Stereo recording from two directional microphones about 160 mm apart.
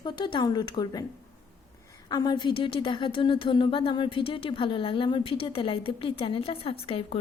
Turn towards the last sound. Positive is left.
turn(degrees=35)  # may be behind; listen again after turning